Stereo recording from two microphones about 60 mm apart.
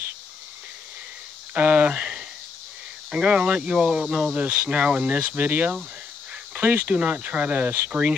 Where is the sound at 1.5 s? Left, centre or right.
Right.